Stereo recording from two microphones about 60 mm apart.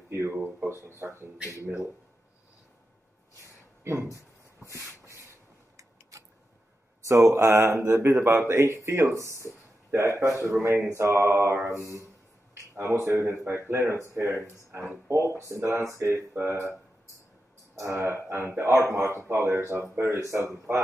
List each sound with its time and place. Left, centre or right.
0.1 s speech: right
3.8 s speech: right
4.6 s a sound: left
5.0 s a sound: right
7.1 s speech: right
17.7 s speech: right
19.2 s speech: right